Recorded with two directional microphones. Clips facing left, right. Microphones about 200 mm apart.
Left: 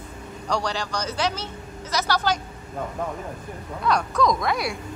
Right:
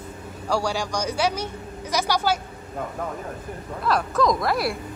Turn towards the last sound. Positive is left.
turn(degrees=0)  # may be behind; listen again after turning